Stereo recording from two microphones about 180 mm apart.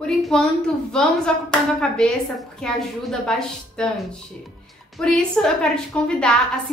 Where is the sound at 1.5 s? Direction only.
5° left (ahead or behind).